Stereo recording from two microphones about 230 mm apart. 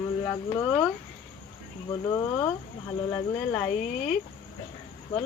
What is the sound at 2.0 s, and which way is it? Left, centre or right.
Speech, centre.